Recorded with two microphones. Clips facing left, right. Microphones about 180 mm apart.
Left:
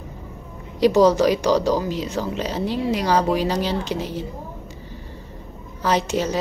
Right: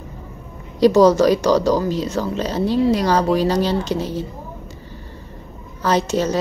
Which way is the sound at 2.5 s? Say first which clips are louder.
Right 7 dB; 15° left (ahead or behind).